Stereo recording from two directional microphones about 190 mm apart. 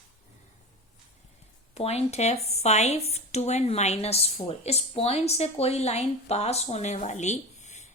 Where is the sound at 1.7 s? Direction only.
35° left (ahead or behind).